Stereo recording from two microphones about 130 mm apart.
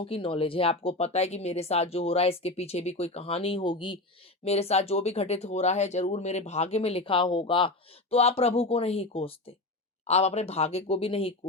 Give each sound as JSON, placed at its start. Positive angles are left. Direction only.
{"t": 0.0, "sound": "speech", "side_deg": 45}
{"t": 4.4, "sound": "speech", "side_deg": 55}
{"t": 8.1, "sound": "speech", "side_deg": 50}